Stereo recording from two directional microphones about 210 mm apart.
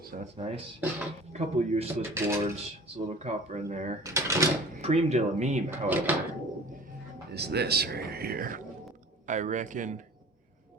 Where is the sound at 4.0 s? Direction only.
15° right (ahead or behind).